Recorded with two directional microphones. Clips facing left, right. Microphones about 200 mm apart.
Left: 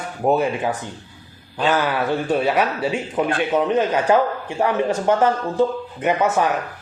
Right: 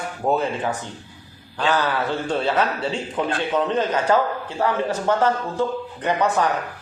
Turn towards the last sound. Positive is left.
turn(degrees=15)  # may be behind; listen again after turning